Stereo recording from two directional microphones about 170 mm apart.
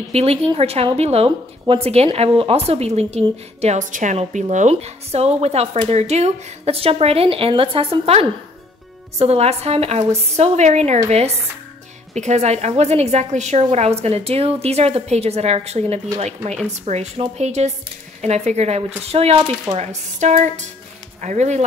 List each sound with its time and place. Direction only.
0.1 s a woman's voice: 35° right (ahead or behind)
16.8 s a woman's voice: 40° right (ahead or behind)